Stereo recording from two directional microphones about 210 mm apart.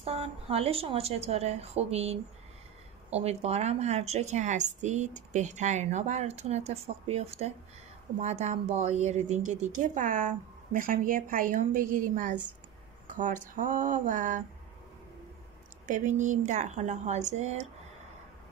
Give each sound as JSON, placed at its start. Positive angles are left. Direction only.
{"t": 0.0, "sound": "a woman's voice", "side_deg": -30}
{"t": 15.9, "sound": "a woman's voice", "side_deg": -35}